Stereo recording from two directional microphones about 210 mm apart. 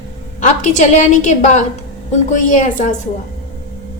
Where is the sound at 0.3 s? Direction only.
35° left (ahead or behind).